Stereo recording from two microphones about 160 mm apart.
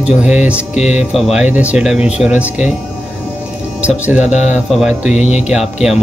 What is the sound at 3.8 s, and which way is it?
Speech, 5° right (ahead or behind).